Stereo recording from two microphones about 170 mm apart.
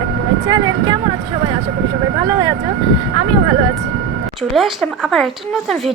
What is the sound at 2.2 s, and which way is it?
Speech, 20° right (ahead or behind).